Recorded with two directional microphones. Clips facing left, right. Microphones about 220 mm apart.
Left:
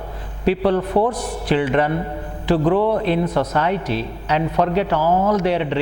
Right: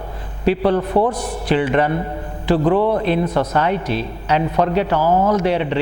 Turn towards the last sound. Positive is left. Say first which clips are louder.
# right 1 dB
turn(degrees=-15)  # may be behind; listen again after turning